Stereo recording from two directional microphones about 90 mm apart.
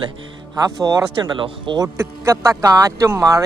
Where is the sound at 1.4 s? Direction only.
65° right (ahead or behind).